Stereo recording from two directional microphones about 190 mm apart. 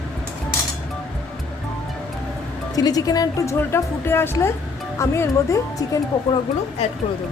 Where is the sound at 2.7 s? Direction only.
20° left (ahead or behind).